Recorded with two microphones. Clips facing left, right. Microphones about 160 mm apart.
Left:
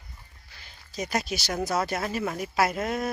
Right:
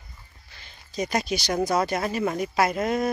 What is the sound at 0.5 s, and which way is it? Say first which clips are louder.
Speech: right 3 dB; 5° left (ahead or behind).